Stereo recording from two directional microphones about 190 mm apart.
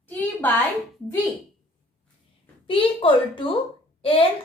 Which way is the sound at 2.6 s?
25° left (ahead or behind).